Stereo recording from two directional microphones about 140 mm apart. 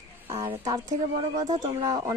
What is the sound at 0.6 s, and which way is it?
Speech, 25° right (ahead or behind).